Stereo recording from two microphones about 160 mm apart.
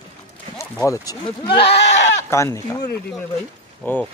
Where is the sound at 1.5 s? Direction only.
90° left.